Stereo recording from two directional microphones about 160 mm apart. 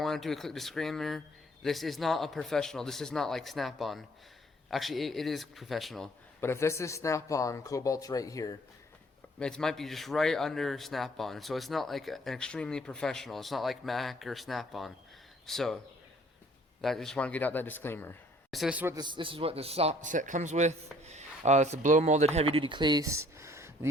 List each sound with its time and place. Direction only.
0.0 s a man's voice: centre (ahead or behind)
6.4 s speech: 15° left (ahead or behind)
9.4 s a man's voice: 5° left (ahead or behind)
16.8 s a man's voice: centre (ahead or behind)
18.5 s a man's voice: 5° right (ahead or behind)
18.9 s a man's voice: 30° right (ahead or behind)